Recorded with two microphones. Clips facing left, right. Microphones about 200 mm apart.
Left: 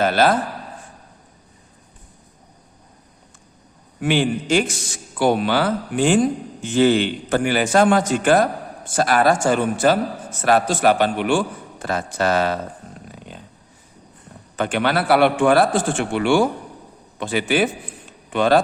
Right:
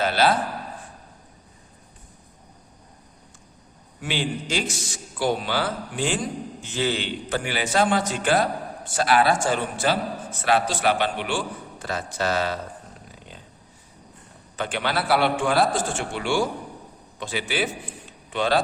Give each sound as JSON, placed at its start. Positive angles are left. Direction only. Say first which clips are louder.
{"t": 0.0, "sound": "a man's voice", "louder": "left 4 dB", "side_deg": 50}
{"t": 4.0, "sound": "a man's voice", "louder": "left 8 dB", "side_deg": 55}
{"t": 14.5, "sound": "a man's voice", "louder": "left 6 dB", "side_deg": 55}